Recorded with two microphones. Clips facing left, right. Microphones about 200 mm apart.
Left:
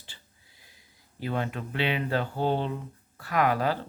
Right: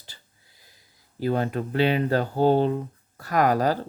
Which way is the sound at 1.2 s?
40° right (ahead or behind).